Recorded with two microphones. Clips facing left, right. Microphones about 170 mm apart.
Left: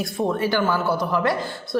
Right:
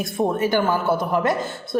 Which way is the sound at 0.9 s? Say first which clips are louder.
Right 1 dB; 50° right (ahead or behind).